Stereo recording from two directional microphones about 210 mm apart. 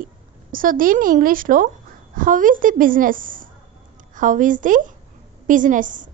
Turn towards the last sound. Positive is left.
turn(degrees=-40)  # may be behind; listen again after turning